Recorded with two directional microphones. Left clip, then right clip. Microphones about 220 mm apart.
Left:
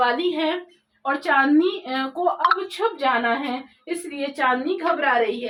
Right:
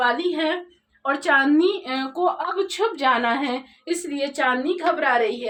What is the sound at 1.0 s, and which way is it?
Speech, 10° right (ahead or behind).